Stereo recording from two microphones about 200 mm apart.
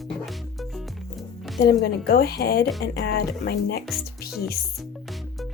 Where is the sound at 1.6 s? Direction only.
50° left (ahead or behind).